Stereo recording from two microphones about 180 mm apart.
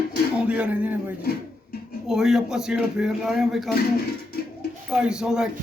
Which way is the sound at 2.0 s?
Centre (ahead or behind).